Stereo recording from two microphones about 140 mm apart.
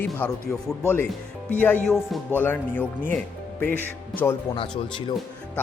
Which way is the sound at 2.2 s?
15° left (ahead or behind).